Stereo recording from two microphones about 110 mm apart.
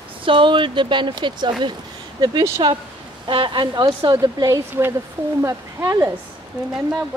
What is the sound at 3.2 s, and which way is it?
Speech, 50° right (ahead or behind).